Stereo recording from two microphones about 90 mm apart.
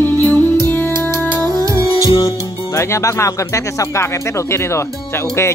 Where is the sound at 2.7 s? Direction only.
35° left (ahead or behind).